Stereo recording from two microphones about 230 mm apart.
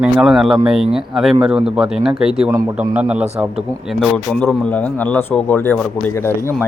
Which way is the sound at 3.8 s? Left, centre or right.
Centre.